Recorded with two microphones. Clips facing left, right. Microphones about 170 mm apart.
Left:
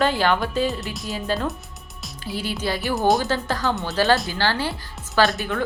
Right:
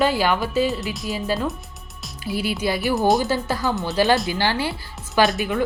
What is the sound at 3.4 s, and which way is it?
Speech, 10° right (ahead or behind).